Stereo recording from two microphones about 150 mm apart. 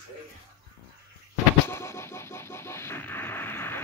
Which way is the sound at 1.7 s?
15° left (ahead or behind).